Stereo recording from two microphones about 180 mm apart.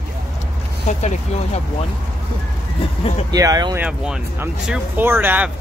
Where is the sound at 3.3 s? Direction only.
20° right (ahead or behind).